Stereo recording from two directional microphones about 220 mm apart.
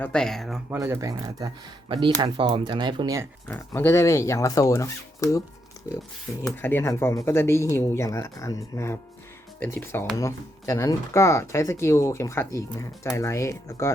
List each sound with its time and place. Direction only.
0.0 s speech: 5° left (ahead or behind)
0.8 s speech: 15° right (ahead or behind)
3.5 s speech: 10° left (ahead or behind)